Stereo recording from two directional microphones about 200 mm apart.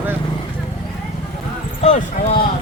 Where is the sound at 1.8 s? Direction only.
35° left (ahead or behind).